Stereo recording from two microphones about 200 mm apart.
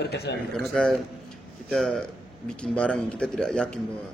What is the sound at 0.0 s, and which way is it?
Speech, 55° left (ahead or behind).